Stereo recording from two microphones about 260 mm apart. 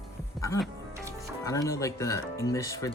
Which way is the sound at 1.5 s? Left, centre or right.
Centre.